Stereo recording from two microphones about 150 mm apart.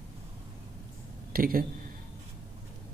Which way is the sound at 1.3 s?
75° right (ahead or behind).